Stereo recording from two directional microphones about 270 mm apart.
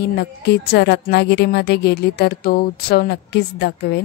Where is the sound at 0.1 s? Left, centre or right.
Left.